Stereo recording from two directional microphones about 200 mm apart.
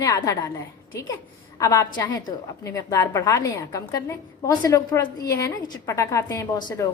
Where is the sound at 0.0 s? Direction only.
15° left (ahead or behind).